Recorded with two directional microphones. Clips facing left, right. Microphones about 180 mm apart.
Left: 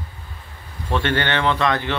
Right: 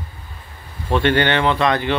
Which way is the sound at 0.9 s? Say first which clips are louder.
Right 5 dB; 15° right (ahead or behind).